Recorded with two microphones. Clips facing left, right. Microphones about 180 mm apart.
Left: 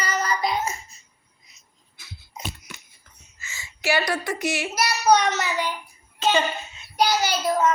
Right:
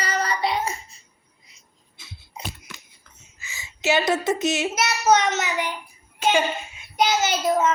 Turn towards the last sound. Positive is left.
turn(degrees=-20)  # may be behind; listen again after turning